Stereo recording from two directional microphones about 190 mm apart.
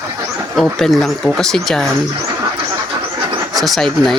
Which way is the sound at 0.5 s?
Centre (ahead or behind).